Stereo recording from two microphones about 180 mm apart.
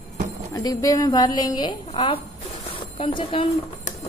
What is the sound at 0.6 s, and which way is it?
A woman's voice, 20° left (ahead or behind).